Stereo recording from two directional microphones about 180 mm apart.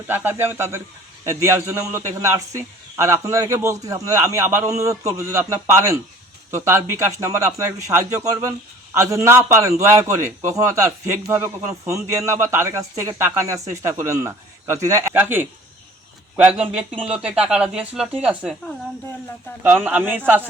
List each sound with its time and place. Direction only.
0.1 s a man's voice: 10° right (ahead or behind)
19.6 s a man's voice: 10° right (ahead or behind)